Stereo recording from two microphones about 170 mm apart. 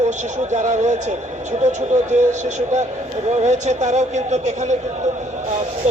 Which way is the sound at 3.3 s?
45° right (ahead or behind).